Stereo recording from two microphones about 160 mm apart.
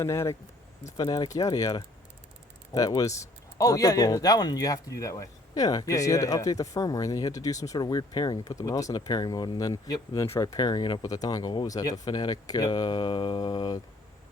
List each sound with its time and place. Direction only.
0.0 s speech: 15° left (ahead or behind)